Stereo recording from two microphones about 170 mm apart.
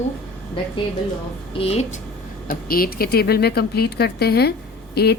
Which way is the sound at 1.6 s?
40° left (ahead or behind).